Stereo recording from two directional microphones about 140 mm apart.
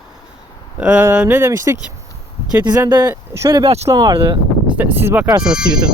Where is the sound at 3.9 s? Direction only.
35° right (ahead or behind).